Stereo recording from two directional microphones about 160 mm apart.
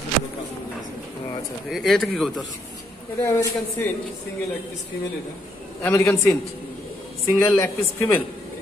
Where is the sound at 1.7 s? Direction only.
Centre (ahead or behind).